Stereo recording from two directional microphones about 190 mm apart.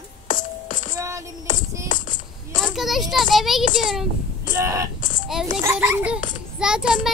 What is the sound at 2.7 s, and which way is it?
Speech, centre (ahead or behind).